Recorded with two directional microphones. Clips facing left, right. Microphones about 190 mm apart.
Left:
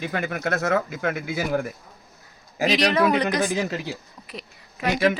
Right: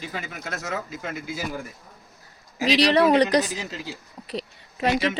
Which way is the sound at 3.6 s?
65° left (ahead or behind).